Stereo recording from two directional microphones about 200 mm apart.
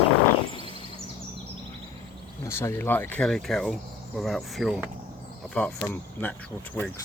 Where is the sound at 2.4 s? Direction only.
15° left (ahead or behind).